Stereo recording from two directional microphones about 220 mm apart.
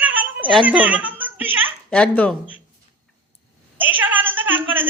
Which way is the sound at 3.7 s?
10° right (ahead or behind).